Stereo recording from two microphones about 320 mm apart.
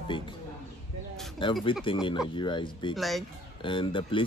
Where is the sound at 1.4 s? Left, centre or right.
Centre.